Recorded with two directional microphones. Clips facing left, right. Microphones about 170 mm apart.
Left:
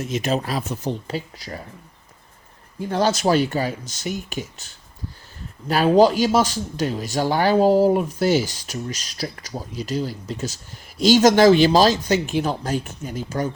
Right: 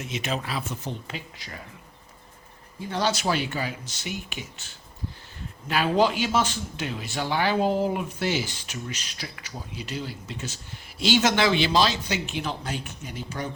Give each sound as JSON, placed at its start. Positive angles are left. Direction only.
{"t": 0.0, "sound": "speech", "side_deg": 40}
{"t": 2.9, "sound": "speech", "side_deg": 45}
{"t": 5.6, "sound": "speech", "side_deg": 40}